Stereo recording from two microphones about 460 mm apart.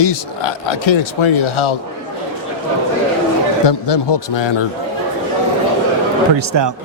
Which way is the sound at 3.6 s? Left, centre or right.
Left.